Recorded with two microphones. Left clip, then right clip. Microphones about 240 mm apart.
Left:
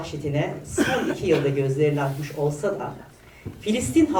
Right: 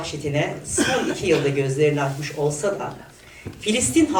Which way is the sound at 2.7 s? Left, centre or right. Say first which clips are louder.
Right 2 dB; centre.